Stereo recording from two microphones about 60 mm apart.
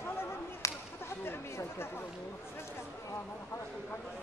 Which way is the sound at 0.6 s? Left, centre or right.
Left.